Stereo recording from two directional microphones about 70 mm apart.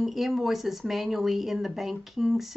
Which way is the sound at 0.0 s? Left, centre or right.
Centre.